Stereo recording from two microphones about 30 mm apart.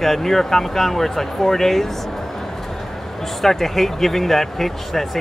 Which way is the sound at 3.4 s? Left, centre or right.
Centre.